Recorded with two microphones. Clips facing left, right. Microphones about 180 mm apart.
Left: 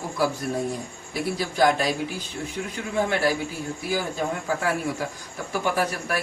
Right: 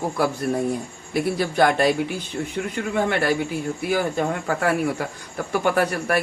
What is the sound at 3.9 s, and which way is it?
Speech, 65° right (ahead or behind).